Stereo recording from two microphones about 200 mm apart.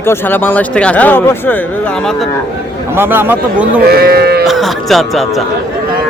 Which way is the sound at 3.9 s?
50° right (ahead or behind).